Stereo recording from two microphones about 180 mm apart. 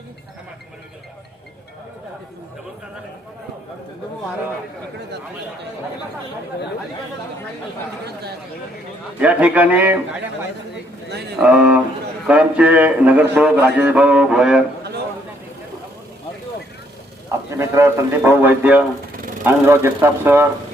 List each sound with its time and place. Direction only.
9.2 s speech: 10° right (ahead or behind)
11.1 s a sound: 65° right (ahead or behind)
11.3 s speech: 5° right (ahead or behind)
17.5 s speech: 15° right (ahead or behind)